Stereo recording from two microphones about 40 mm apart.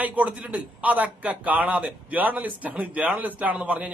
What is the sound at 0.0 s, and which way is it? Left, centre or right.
A man's voice, right.